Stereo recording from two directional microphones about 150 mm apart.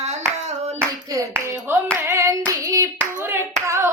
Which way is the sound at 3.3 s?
15° right (ahead or behind).